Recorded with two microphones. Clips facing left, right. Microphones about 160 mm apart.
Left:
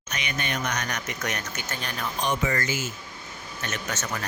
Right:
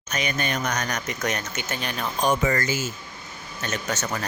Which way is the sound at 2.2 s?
40° right (ahead or behind).